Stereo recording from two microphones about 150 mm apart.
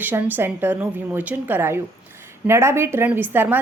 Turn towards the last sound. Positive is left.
turn(degrees=-15)  # may be behind; listen again after turning